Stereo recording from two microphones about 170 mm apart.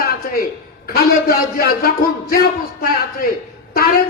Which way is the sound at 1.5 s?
65° left (ahead or behind).